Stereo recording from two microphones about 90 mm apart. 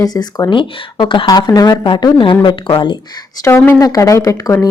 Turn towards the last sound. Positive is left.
turn(degrees=40)  # may be behind; listen again after turning